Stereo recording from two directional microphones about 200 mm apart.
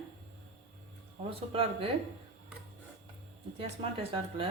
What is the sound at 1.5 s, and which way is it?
Speech, 30° right (ahead or behind).